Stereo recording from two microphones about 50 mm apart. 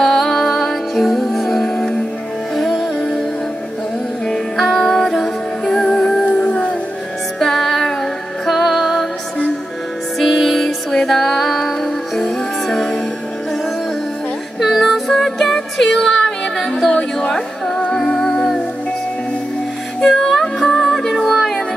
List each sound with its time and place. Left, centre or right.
0.0 s music: centre
4.3 s music: centre
10.1 s music: centre
14.6 s music: centre
20.1 s music: centre